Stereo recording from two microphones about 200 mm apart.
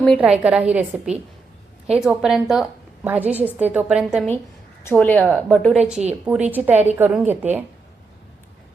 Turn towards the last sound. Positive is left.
turn(degrees=-10)  # may be behind; listen again after turning